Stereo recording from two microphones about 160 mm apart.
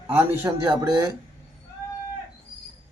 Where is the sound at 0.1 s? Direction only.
15° right (ahead or behind).